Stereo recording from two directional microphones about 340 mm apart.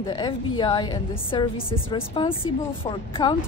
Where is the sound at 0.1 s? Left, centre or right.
Centre.